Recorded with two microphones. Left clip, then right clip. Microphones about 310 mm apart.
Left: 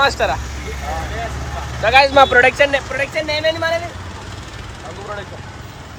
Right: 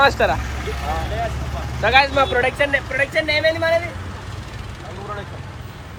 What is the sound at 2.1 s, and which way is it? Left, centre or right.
Speech, left.